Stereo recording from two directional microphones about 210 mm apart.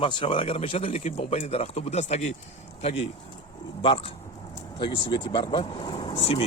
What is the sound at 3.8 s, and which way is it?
Speech, 25° left (ahead or behind).